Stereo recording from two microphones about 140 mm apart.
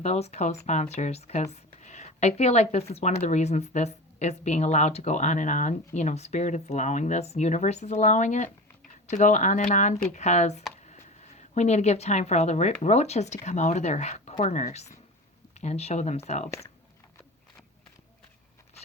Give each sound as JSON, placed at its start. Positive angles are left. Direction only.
{"t": 0.0, "sound": "a woman's voice", "side_deg": 50}